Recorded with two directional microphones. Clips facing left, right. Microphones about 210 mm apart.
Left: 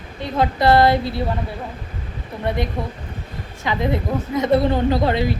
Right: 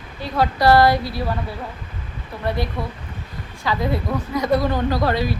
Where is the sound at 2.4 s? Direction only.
20° left (ahead or behind).